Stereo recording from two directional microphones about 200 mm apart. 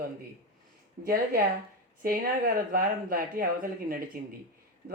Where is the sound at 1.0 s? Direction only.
45° right (ahead or behind).